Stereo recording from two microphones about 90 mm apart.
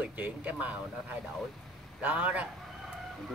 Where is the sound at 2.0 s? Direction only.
15° right (ahead or behind).